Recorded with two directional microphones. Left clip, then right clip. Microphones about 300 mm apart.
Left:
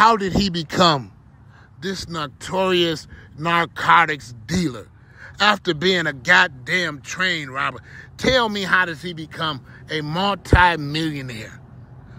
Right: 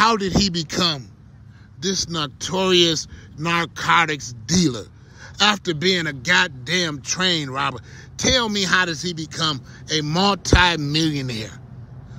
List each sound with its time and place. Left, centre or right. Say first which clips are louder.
0.0 s speech: left 2 dB; centre